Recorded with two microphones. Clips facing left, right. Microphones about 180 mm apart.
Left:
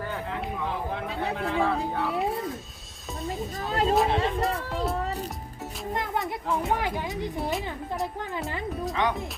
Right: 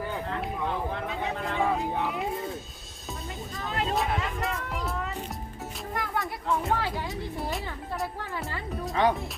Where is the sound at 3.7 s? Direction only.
35° left (ahead or behind).